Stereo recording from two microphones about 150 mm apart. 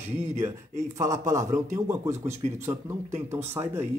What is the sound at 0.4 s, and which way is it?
Speech, 20° right (ahead or behind).